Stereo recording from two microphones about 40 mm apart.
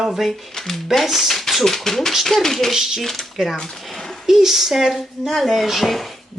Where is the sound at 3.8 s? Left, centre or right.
Centre.